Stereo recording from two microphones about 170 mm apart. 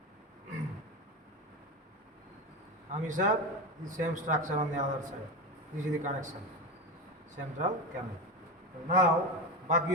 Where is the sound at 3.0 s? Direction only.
50° right (ahead or behind).